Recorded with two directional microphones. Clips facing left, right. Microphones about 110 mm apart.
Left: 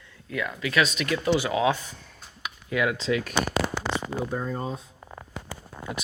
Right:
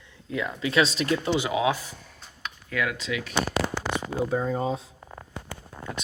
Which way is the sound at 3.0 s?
40° left (ahead or behind).